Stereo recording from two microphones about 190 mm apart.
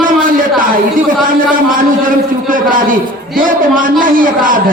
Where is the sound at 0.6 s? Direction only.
45° right (ahead or behind).